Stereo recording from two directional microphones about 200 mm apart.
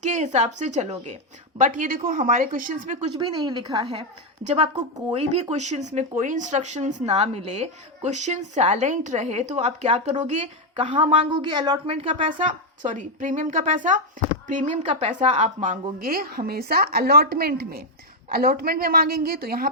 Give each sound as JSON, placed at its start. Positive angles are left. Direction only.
{"t": 0.0, "sound": "speech", "side_deg": -35}
{"t": 3.1, "sound": "a woman's voice", "side_deg": -20}
{"t": 12.5, "sound": "a woman's voice", "side_deg": -40}